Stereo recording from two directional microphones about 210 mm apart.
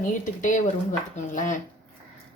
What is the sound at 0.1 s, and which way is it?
A woman's voice, 35° left (ahead or behind).